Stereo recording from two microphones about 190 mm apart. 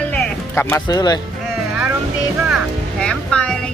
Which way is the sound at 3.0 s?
5° left (ahead or behind).